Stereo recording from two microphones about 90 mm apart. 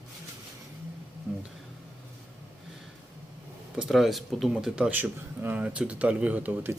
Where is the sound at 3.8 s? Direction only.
Centre (ahead or behind).